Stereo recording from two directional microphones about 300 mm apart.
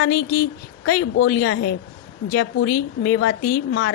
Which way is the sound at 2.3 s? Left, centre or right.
Left.